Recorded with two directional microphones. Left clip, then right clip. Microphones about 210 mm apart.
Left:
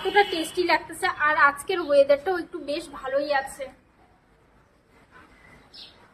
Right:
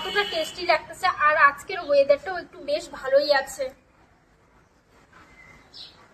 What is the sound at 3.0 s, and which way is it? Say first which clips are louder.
Speech: right 5 dB; 15° right (ahead or behind).